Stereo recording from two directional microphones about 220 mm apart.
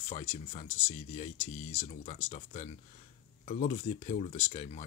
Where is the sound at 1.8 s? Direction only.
30° left (ahead or behind).